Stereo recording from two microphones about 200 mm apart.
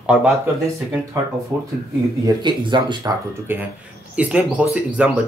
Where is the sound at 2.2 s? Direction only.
25° right (ahead or behind).